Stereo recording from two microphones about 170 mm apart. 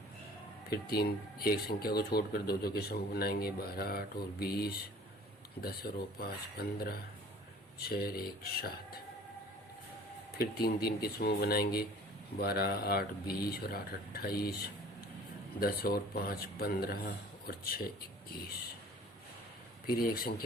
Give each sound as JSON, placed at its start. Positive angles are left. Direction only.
{"t": 0.7, "sound": "speech", "side_deg": 65}
{"t": 10.3, "sound": "speech", "side_deg": 65}
{"t": 15.6, "sound": "speech", "side_deg": 65}
{"t": 19.9, "sound": "speech", "side_deg": 60}